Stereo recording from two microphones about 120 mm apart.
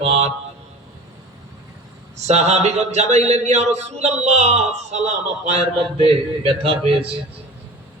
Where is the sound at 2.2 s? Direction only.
70° right (ahead or behind).